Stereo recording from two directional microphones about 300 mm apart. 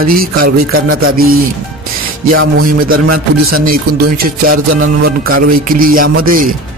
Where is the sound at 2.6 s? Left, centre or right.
Right.